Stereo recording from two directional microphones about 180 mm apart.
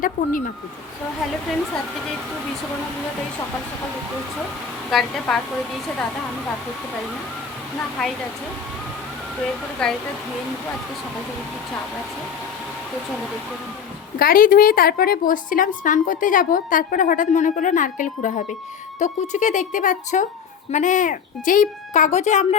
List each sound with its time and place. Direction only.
0.0 s a woman's voice: 50° left (ahead or behind)
1.5 s speech: centre (ahead or behind)
4.9 s speech: centre (ahead or behind)
9.8 s speech: 5° left (ahead or behind)
14.2 s a woman's voice: 50° left (ahead or behind)